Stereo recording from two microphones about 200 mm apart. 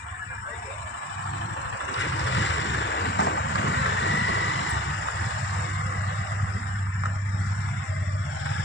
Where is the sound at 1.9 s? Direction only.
65° left (ahead or behind).